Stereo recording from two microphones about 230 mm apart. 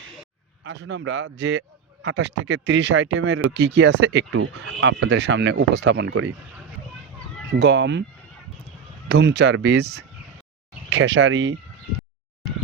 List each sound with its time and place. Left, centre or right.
0.6 s speech: right
7.6 s speech: right
9.0 s speech: right